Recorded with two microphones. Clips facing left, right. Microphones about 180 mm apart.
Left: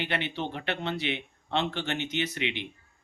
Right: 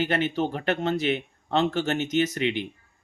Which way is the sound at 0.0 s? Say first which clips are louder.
Right 7 dB; 45° right (ahead or behind).